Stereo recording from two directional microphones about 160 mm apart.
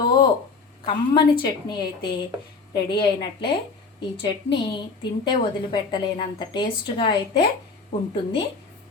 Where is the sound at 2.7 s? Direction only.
30° left (ahead or behind).